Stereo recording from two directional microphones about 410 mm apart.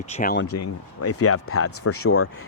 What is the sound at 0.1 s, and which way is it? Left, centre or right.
Speech, centre.